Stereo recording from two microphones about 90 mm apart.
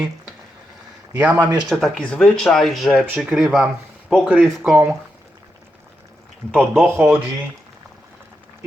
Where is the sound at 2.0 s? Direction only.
10° left (ahead or behind).